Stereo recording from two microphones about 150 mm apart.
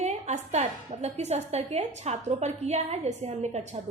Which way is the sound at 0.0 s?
50° right (ahead or behind).